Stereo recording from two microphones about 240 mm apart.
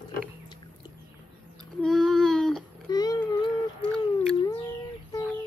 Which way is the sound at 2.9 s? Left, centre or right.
Centre.